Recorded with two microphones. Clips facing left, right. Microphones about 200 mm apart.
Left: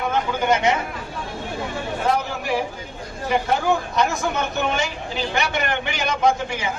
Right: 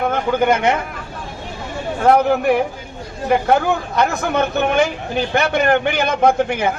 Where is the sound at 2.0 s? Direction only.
60° right (ahead or behind).